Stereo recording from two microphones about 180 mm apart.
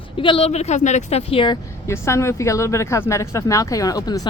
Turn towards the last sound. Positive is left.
turn(degrees=20)  # may be behind; listen again after turning